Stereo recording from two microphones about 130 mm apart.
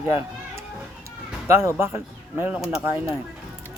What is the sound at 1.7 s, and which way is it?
Speech, 20° right (ahead or behind).